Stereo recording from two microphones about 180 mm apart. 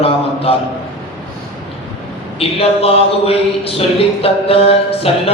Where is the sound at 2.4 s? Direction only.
35° left (ahead or behind).